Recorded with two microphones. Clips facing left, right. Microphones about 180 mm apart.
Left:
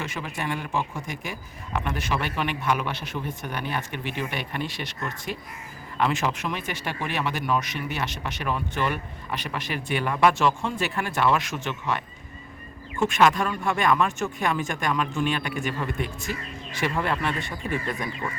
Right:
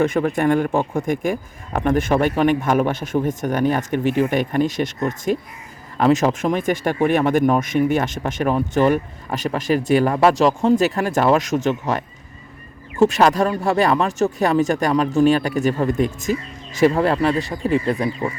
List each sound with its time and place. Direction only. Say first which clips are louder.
0.0 s a man's voice: right 14 dB; 55° right (ahead or behind); by 18.3 s 30° right (ahead or behind)